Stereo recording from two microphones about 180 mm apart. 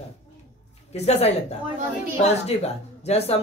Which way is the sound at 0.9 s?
35° left (ahead or behind).